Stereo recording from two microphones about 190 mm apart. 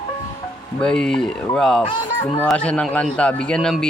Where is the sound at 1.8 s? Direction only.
25° left (ahead or behind).